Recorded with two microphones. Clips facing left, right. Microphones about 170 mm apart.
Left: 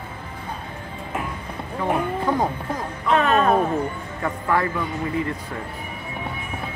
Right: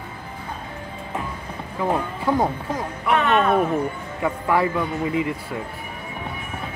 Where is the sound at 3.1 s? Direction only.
35° left (ahead or behind).